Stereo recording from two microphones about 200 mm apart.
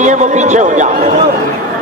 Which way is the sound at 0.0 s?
35° right (ahead or behind).